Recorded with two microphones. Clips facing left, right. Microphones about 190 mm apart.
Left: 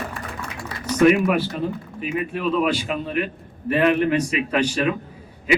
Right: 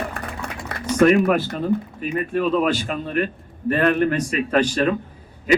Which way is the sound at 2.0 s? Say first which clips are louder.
Right 3 dB; 45° right (ahead or behind).